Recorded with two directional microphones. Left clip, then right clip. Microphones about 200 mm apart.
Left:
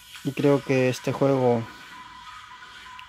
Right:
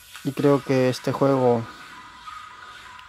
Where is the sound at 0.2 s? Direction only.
5° right (ahead or behind).